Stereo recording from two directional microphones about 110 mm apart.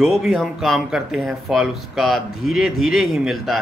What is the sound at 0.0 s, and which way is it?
Speech, 5° right (ahead or behind).